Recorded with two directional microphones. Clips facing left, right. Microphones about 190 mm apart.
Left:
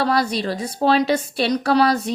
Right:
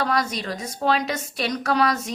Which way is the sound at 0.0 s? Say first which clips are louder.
Left 4 dB; 30° left (ahead or behind).